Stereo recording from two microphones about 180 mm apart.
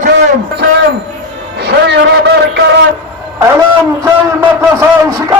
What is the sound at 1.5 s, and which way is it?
Music, 65° right (ahead or behind).